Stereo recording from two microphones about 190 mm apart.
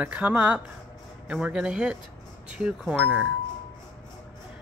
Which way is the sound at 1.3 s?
5° right (ahead or behind).